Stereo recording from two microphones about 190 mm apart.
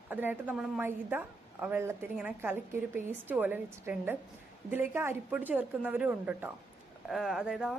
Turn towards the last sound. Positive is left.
turn(degrees=-5)  # may be behind; listen again after turning